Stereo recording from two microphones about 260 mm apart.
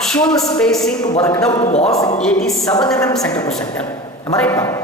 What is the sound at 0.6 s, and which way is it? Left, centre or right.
Speech, centre.